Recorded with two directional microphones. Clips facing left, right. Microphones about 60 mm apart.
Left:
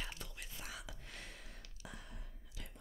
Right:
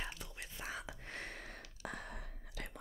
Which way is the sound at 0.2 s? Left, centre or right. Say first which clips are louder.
Right 1 dB; centre.